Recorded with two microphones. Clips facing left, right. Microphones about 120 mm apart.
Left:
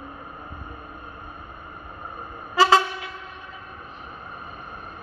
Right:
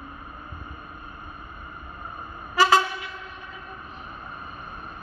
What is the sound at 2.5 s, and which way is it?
Train, 25° left (ahead or behind).